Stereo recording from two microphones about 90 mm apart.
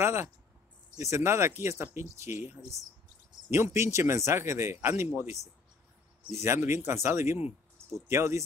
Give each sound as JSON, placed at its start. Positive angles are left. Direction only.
{"t": 0.0, "sound": "speech", "side_deg": -30}